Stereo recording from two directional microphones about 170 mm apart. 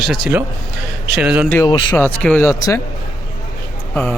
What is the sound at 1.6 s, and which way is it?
Speech, 25° left (ahead or behind).